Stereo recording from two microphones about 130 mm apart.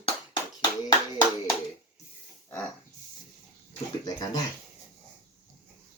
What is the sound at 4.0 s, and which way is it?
Speech, 30° left (ahead or behind).